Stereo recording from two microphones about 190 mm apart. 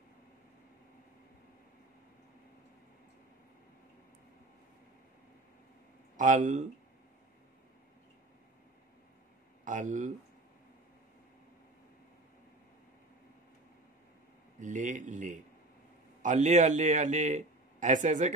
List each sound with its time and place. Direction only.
6.1 s speech: 40° right (ahead or behind)
9.7 s speech: 40° right (ahead or behind)
14.6 s speech: 40° right (ahead or behind)